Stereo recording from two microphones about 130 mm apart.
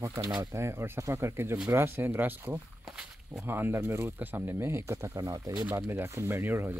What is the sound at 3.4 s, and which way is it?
Speech, 15° right (ahead or behind).